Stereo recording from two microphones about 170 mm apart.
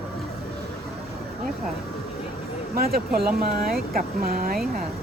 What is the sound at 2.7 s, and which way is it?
Speech, 60° right (ahead or behind).